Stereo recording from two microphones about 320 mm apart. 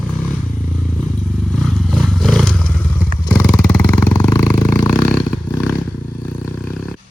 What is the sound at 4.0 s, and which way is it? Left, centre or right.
Vehicle, centre.